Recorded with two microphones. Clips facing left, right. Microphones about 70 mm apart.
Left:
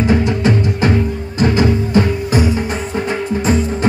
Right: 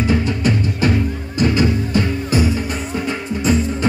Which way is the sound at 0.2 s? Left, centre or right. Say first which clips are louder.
Left 4 dB; left.